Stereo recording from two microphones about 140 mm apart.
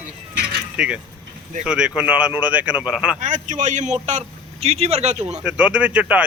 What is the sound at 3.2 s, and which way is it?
Speech, 65° right (ahead or behind).